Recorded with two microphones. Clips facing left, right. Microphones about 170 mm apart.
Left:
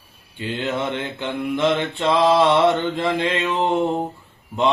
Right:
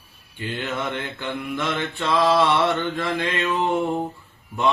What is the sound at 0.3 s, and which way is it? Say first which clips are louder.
Mantra: left 4 dB; 20° left (ahead or behind).